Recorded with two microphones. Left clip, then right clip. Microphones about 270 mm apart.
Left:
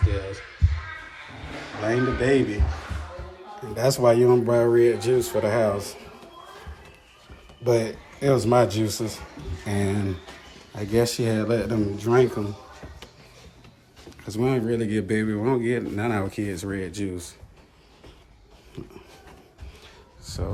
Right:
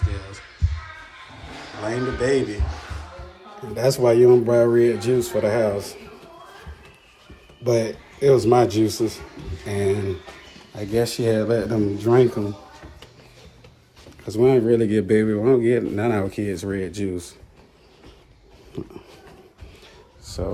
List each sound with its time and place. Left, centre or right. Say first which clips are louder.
1.8 s speech: even; centre
3.6 s speech: right 2 dB; centre
7.6 s speech: right 1 dB; centre
14.3 s speech: right 8 dB; centre
18.7 s speech: right 7 dB; centre
20.2 s a man's voice: right 5 dB; centre